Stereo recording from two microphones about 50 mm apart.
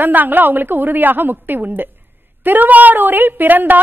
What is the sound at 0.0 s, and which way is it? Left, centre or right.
A woman's voice, right.